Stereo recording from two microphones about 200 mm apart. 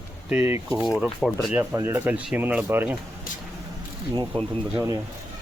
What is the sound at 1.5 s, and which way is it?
Speech, 10° right (ahead or behind).